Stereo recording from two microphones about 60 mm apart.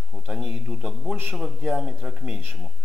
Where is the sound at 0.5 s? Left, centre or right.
Centre.